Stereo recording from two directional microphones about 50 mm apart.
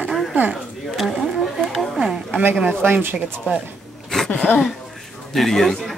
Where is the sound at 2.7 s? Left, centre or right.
Right.